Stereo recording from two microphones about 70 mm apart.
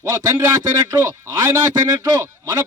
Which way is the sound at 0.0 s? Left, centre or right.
Right.